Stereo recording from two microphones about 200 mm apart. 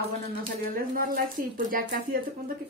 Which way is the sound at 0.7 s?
45° right (ahead or behind).